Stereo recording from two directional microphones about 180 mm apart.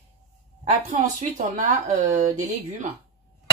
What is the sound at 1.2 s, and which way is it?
Speech, 45° right (ahead or behind).